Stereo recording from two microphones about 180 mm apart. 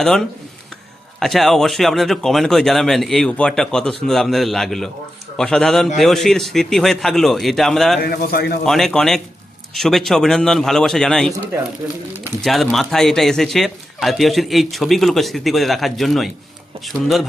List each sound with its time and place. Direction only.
0.0 s speech: 5° left (ahead or behind)
8.0 s a man's voice: 60° left (ahead or behind)
8.6 s speech: centre (ahead or behind)
11.8 s speech: 10° right (ahead or behind)